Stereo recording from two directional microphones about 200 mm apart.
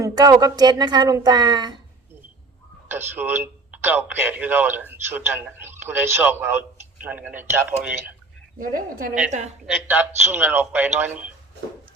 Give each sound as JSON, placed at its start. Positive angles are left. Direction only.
{"t": 0.0, "sound": "a woman's voice", "side_deg": -20}
{"t": 2.9, "sound": "a man's voice", "side_deg": -10}
{"t": 8.5, "sound": "a woman's voice", "side_deg": -45}
{"t": 9.8, "sound": "a man's voice", "side_deg": -10}